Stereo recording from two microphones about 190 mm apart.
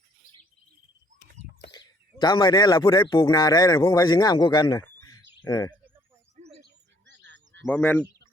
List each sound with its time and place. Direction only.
1.7 s speech: 25° left (ahead or behind)
7.1 s frog: 65° right (ahead or behind)
7.6 s speech: 10° left (ahead or behind)